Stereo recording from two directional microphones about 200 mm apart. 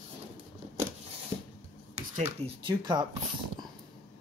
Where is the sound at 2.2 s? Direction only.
25° right (ahead or behind).